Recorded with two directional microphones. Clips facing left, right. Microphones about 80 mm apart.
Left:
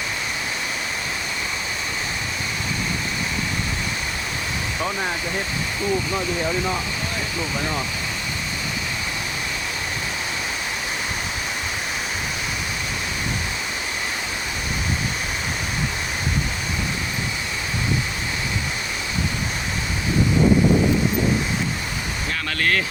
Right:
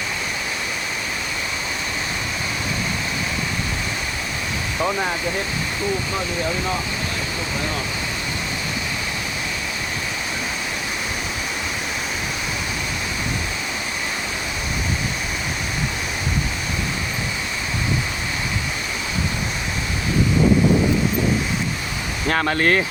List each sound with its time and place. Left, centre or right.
22.4 s speech: right